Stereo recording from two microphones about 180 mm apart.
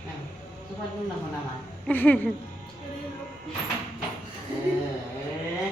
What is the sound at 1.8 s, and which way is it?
Speech, 10° left (ahead or behind).